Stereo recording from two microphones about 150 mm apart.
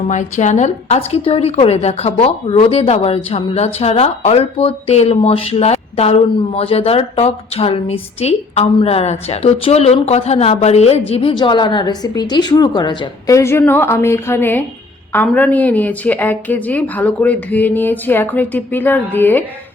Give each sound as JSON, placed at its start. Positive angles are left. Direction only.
{"t": 0.1, "sound": "a woman's voice", "side_deg": 55}
{"t": 13.3, "sound": "speech", "side_deg": 15}